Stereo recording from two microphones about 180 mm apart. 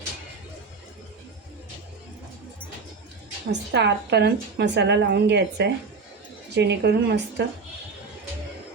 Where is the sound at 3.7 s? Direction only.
65° right (ahead or behind).